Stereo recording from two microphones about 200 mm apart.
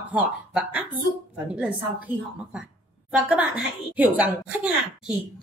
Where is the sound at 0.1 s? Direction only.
5° right (ahead or behind).